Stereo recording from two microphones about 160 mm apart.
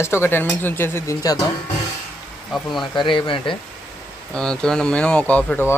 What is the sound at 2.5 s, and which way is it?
Speech, centre (ahead or behind).